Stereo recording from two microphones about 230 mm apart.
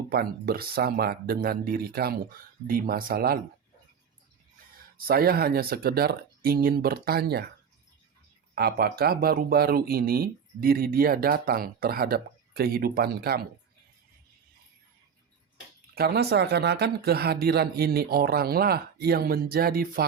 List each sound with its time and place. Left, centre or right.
0.1 s speech: right
4.9 s speech: right
8.5 s speech: right
16.0 s speech: right